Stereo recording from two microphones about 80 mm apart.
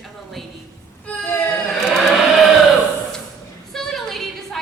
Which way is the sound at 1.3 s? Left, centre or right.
Left.